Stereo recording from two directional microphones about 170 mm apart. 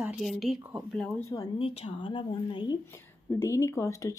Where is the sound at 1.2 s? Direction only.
20° left (ahead or behind).